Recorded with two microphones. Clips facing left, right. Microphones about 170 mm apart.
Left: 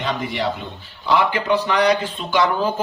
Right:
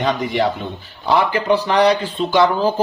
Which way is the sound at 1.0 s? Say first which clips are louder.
Right 2 dB; 35° right (ahead or behind).